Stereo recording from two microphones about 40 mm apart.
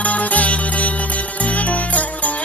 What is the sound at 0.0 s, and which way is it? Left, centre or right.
Music, left.